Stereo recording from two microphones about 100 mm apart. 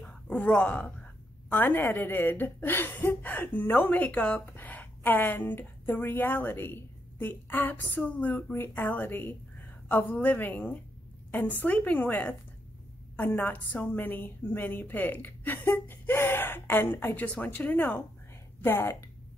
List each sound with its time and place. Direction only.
0.0 s a woman's voice: 10° left (ahead or behind)